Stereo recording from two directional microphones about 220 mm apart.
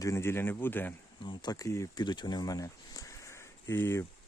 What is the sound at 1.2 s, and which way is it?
Speech, 20° left (ahead or behind).